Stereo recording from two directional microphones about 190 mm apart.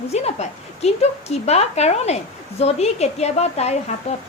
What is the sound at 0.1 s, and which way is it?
Speech, 35° left (ahead or behind).